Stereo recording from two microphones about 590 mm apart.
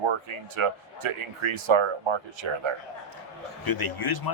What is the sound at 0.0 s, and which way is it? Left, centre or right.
Speech, right.